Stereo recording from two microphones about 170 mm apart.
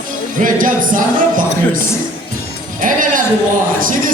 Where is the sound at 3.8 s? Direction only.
55° right (ahead or behind).